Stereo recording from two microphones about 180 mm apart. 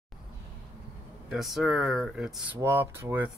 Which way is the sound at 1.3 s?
Centre (ahead or behind).